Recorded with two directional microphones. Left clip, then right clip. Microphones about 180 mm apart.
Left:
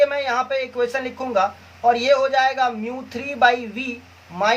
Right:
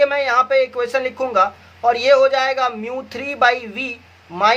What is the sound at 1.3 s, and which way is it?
Speech, 45° right (ahead or behind).